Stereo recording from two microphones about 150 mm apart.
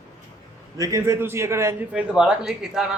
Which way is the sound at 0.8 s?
20° right (ahead or behind).